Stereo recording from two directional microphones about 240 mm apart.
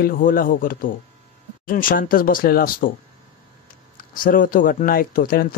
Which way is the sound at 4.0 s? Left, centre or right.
Left.